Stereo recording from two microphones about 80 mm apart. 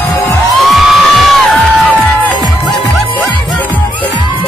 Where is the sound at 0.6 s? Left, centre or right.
Centre.